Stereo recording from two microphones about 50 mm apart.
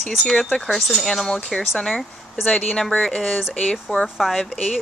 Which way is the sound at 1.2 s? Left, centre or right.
Centre.